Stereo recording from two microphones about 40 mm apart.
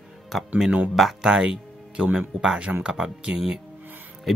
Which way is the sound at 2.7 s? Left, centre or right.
Right.